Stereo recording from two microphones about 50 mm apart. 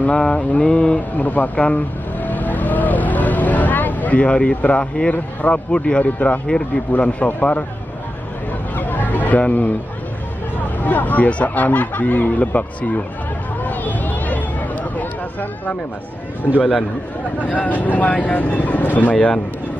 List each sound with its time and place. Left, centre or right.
0.0 s mantra: left
1.1 s vehicle: left
4.6 s mantra: left
6.9 s speech: left
8.7 s a sound: left
10.8 s speech: left
13.7 s a sound: left
17.4 s speech: left